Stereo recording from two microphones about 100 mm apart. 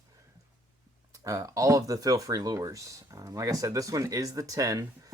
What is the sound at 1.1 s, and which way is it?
Speech, 35° right (ahead or behind).